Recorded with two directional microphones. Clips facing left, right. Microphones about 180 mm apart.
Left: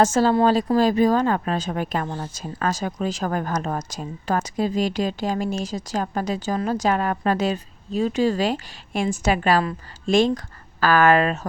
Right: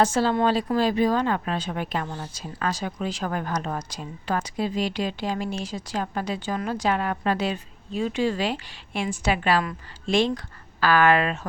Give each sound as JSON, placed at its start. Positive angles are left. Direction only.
{"t": 0.0, "sound": "a woman's voice", "side_deg": 45}